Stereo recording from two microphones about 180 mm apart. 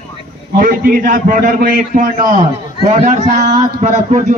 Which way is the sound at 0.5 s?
50° right (ahead or behind).